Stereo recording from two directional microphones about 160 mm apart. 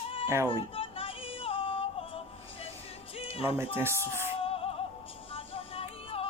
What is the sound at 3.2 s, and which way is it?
Music, 35° left (ahead or behind).